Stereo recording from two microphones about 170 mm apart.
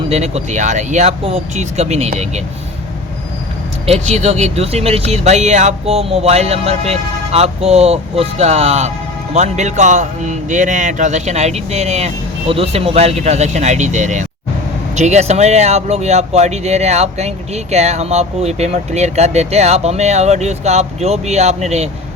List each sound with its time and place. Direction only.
0.1 s speech: 40° right (ahead or behind)
4.0 s speech: 40° right (ahead or behind)